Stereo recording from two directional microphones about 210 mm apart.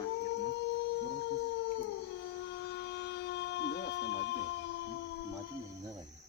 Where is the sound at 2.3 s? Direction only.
55° left (ahead or behind).